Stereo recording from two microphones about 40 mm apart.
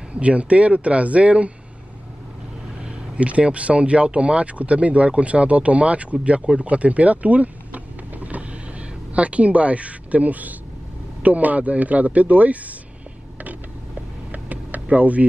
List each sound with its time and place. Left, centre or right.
0.1 s speech: right
3.2 s speech: right
6.5 s power windows: right
11.2 s speech: right
14.3 s a sound: right
14.9 s speech: right